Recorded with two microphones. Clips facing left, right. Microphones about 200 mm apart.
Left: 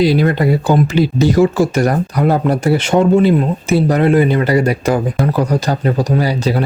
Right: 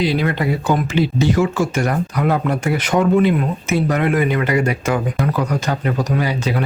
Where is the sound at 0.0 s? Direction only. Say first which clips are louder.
Left 6 dB; 40° left (ahead or behind).